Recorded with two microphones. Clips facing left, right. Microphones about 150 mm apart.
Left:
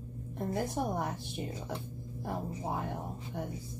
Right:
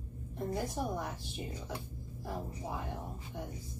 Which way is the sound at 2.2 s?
60° left (ahead or behind).